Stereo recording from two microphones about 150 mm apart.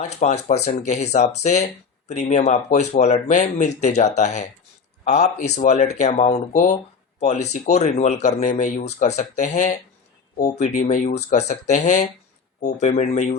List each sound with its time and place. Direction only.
0.0 s speech: 50° left (ahead or behind)
5.0 s speech: 60° left (ahead or behind)
11.3 s speech: 50° left (ahead or behind)